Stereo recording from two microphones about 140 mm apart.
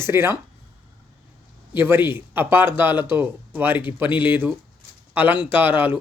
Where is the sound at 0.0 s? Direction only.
15° right (ahead or behind).